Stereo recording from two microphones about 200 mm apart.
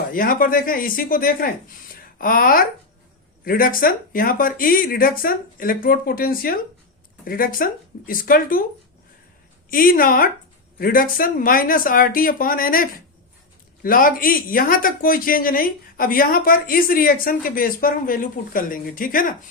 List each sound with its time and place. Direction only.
0.1 s speech: 45° left (ahead or behind)
9.6 s speech: 45° left (ahead or behind)